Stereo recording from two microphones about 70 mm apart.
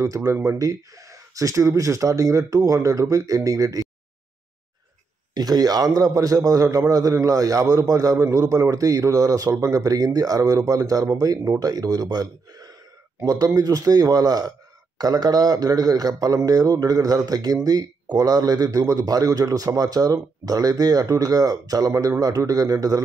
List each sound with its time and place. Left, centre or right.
0.0 s speech: right
5.3 s a man's voice: right